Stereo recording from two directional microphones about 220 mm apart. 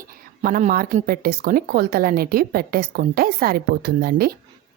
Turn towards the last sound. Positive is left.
turn(degrees=-45)  # may be behind; listen again after turning